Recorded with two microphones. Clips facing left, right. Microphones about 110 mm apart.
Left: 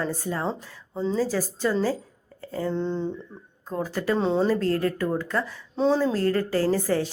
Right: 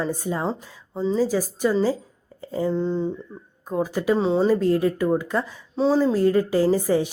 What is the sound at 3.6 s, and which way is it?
Speech, 15° right (ahead or behind).